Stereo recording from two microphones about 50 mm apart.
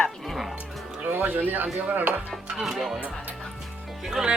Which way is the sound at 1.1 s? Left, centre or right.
Right.